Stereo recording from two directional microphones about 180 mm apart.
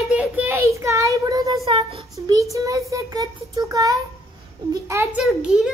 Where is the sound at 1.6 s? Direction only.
30° right (ahead or behind).